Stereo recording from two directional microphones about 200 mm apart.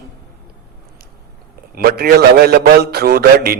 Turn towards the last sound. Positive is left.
turn(degrees=-50)  # may be behind; listen again after turning